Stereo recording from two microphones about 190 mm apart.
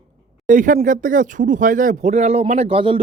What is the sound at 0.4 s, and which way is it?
Speech, 45° right (ahead or behind).